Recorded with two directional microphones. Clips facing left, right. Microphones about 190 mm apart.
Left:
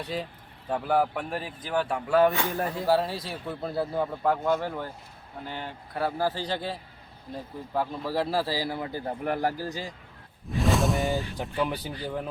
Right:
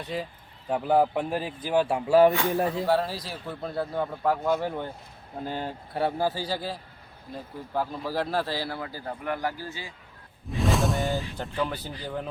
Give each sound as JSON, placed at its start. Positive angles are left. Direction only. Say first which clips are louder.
{"t": 0.0, "sound": "a man's voice", "louder": "even", "side_deg": 0}
{"t": 0.7, "sound": "a man's voice", "louder": "right 3 dB", "side_deg": -20}
{"t": 2.7, "sound": "a man's voice", "louder": "even", "side_deg": 0}
{"t": 4.6, "sound": "speech", "louder": "right 2 dB", "side_deg": -15}
{"t": 5.4, "sound": "speech", "louder": "right 5 dB", "side_deg": -40}
{"t": 5.9, "sound": "a man's voice", "louder": "right 1 dB", "side_deg": -25}
{"t": 6.2, "sound": "a man's voice", "louder": "even", "side_deg": -10}
{"t": 8.8, "sound": "a man's voice", "louder": "left 3 dB", "side_deg": 25}
{"t": 9.2, "sound": "speech", "louder": "left 2 dB", "side_deg": 40}
{"t": 10.5, "sound": "music", "louder": "left 1 dB", "side_deg": 0}
{"t": 11.6, "sound": "a man's voice", "louder": "left 1 dB", "side_deg": 10}